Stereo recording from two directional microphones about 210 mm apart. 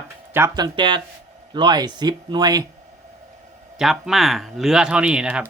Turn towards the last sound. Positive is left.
turn(degrees=-5)  # may be behind; listen again after turning